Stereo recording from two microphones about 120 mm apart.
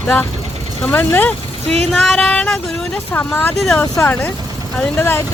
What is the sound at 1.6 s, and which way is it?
Vehicle, 60° right (ahead or behind).